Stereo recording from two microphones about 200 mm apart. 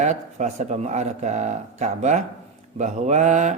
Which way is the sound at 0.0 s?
35° right (ahead or behind).